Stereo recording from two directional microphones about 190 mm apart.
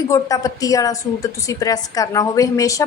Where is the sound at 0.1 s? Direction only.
20° left (ahead or behind).